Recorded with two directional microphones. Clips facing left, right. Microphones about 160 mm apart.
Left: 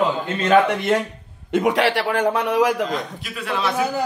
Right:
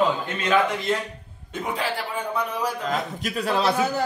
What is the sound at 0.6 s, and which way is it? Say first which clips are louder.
Speech: left 5 dB; 65° left (ahead or behind).